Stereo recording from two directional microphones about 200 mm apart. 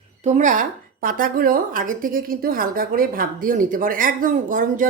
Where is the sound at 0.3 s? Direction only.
40° right (ahead or behind).